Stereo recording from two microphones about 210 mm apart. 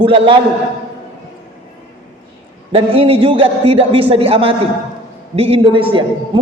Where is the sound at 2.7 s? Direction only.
25° right (ahead or behind).